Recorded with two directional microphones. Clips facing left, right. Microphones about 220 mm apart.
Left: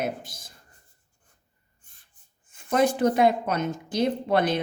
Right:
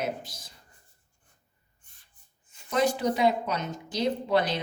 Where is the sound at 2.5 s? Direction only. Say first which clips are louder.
Left 3 dB; 50° left (ahead or behind).